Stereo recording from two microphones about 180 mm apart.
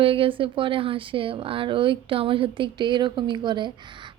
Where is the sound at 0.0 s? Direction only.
30° right (ahead or behind).